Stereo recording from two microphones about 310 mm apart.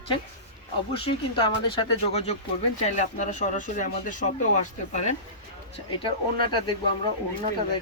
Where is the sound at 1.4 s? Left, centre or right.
Centre.